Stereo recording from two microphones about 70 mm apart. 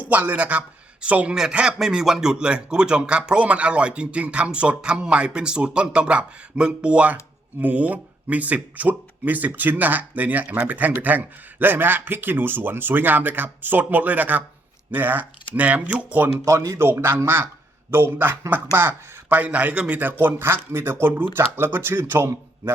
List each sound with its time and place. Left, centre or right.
0.0 s speech: right
16.5 s speech: right
16.8 s speech: right
19.4 s speech: right